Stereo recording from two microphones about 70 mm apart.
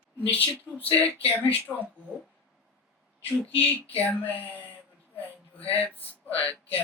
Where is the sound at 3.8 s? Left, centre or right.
Left.